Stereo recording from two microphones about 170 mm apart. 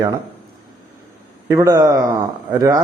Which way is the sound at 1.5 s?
20° right (ahead or behind).